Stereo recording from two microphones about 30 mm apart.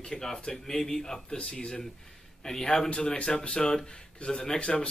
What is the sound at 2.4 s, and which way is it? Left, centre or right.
Speech, left.